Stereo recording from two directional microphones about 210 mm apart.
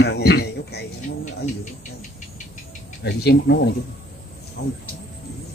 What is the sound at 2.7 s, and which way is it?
Speech, 50° left (ahead or behind).